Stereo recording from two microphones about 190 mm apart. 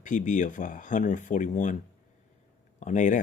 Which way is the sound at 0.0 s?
40° left (ahead or behind).